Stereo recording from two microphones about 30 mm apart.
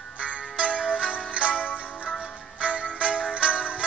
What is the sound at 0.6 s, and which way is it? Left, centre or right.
Music, right.